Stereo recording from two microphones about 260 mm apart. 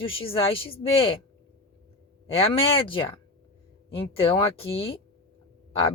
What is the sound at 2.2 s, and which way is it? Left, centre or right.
A woman's voice, left.